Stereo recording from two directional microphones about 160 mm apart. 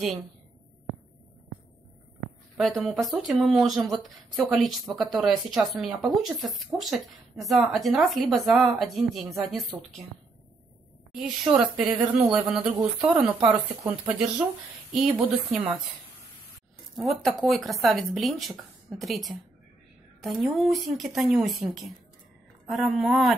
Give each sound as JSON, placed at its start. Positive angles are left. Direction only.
{"t": 2.5, "sound": "a woman's voice", "side_deg": 0}
{"t": 11.1, "sound": "a woman's voice", "side_deg": 0}
{"t": 17.0, "sound": "a woman's voice", "side_deg": 0}